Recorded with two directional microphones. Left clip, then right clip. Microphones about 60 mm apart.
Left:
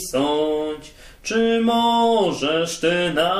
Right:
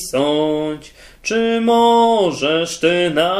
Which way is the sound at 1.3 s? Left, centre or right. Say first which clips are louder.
Right 3 dB; right.